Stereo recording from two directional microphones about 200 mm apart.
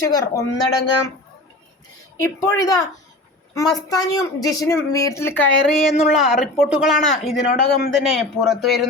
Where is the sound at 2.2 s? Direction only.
15° left (ahead or behind).